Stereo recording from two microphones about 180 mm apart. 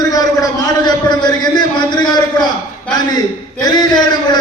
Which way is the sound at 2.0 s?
25° left (ahead or behind).